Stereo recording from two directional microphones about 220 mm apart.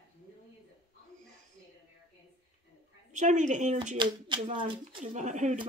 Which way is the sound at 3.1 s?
35° right (ahead or behind).